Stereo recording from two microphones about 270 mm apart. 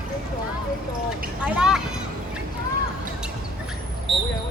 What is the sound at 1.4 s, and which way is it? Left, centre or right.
Speech, centre.